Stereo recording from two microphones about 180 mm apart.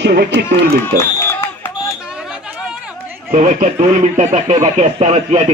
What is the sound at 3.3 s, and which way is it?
Speech, 45° right (ahead or behind).